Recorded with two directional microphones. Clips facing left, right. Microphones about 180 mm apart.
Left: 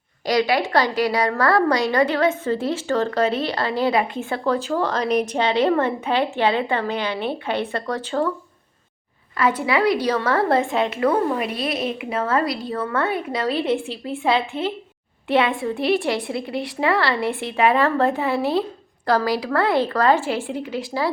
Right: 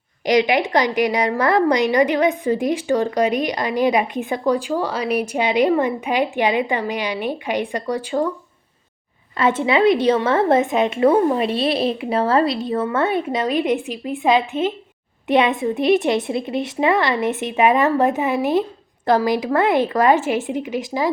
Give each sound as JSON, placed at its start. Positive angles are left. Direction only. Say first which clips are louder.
{"t": 0.3, "sound": "a woman's voice", "louder": "right 3 dB", "side_deg": -20}
{"t": 9.4, "sound": "a woman's voice", "louder": "right 3 dB", "side_deg": -25}